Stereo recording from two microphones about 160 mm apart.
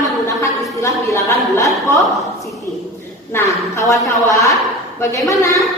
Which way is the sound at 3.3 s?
20° left (ahead or behind).